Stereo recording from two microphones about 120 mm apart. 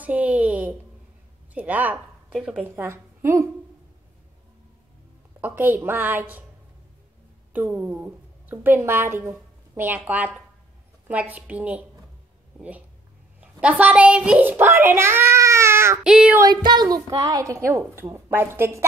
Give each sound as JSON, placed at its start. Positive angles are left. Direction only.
{"t": 0.0, "sound": "a sound", "side_deg": -10}
{"t": 2.4, "sound": "a woman's voice", "side_deg": -15}
{"t": 5.4, "sound": "a woman's voice", "side_deg": -15}
{"t": 7.5, "sound": "a woman's voice", "side_deg": -15}
{"t": 16.0, "sound": "child singing", "side_deg": -5}
{"t": 16.4, "sound": "a woman's voice", "side_deg": -35}